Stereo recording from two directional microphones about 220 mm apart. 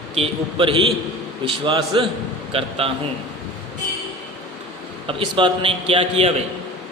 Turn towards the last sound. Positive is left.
turn(degrees=-25)  # may be behind; listen again after turning